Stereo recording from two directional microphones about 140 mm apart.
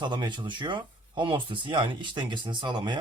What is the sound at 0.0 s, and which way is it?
Speech, 30° right (ahead or behind).